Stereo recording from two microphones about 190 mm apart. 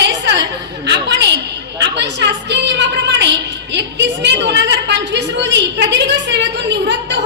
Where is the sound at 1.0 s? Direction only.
70° right (ahead or behind).